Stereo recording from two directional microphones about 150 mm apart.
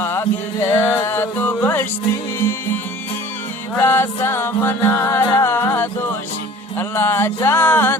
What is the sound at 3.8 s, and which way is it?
Music, 15° left (ahead or behind).